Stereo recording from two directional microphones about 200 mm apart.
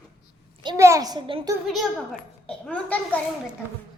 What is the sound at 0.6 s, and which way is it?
Speech, 20° right (ahead or behind).